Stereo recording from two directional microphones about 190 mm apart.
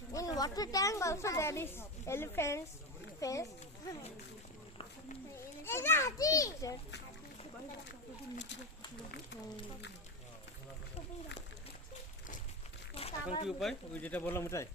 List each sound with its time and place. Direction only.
0.1 s speech: 20° left (ahead or behind)
5.6 s speech: 10° left (ahead or behind)
12.9 s a sound: 30° left (ahead or behind)
13.5 s speech: centre (ahead or behind)